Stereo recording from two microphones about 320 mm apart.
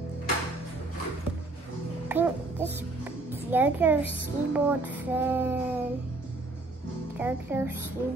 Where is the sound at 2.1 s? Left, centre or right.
Centre.